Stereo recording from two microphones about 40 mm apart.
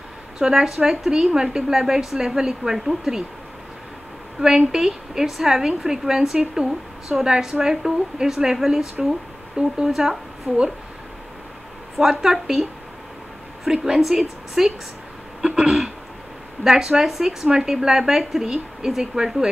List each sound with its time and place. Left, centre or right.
0.4 s speech: centre
4.4 s speech: centre
9.8 s speech: centre
10.5 s speech: right
12.0 s speech: centre
13.7 s speech: centre
15.4 s throat clearing: centre
16.6 s speech: centre